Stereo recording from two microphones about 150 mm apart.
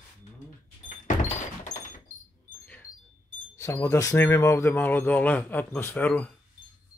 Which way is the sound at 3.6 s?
20° left (ahead or behind).